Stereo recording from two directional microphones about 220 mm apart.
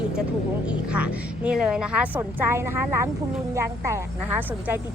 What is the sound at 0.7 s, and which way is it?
A woman's voice, 5° right (ahead or behind).